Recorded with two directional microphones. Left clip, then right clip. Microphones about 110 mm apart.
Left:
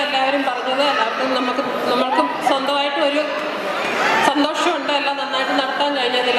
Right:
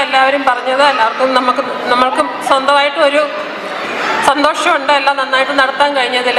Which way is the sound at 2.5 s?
35° right (ahead or behind).